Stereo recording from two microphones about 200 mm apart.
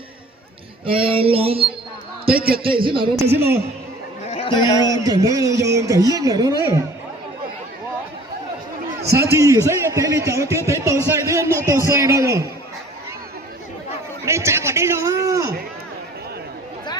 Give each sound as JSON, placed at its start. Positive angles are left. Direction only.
{"t": 0.9, "sound": "a sound", "side_deg": -25}
{"t": 3.3, "sound": "a man's voice", "side_deg": -10}
{"t": 4.3, "sound": "a man's voice", "side_deg": 25}
{"t": 5.0, "sound": "a man's voice", "side_deg": -15}
{"t": 9.1, "sound": "a man's voice", "side_deg": -15}
{"t": 14.3, "sound": "a man's voice", "side_deg": -15}